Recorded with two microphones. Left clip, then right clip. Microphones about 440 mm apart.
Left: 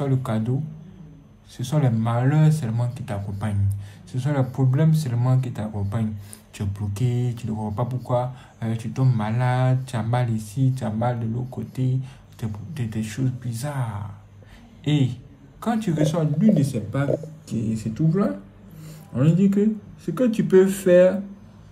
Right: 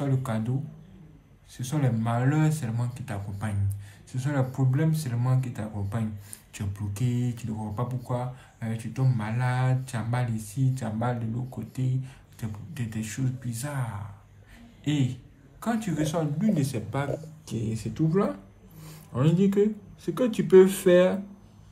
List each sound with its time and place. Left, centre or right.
0.0 s speech: centre
1.6 s speech: centre
16.5 s speech: centre
17.0 s speech: right
18.8 s a sound: right
20.2 s speech: centre